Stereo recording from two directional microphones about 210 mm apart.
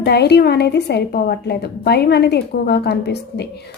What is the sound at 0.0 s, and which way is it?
A woman's voice, 50° left (ahead or behind).